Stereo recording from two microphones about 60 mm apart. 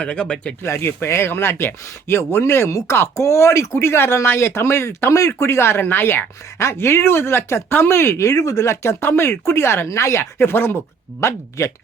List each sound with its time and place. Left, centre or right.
0.0 s speech: centre
0.6 s speech: left
11.2 s speech: left